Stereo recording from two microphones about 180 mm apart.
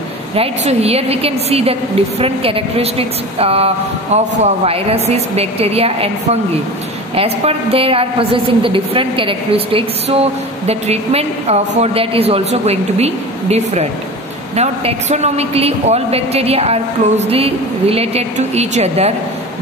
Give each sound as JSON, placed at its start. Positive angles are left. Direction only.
{"t": 0.4, "sound": "a woman's voice", "side_deg": -35}